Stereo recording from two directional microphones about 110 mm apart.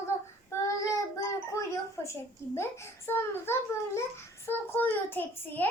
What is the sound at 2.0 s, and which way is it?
A child's voice, 25° left (ahead or behind).